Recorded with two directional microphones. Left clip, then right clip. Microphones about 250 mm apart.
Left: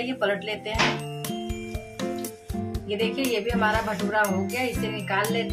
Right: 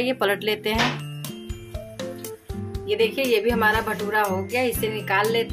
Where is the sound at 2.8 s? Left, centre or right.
Right.